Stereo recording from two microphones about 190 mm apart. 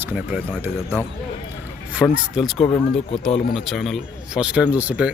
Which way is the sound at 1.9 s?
5° right (ahead or behind).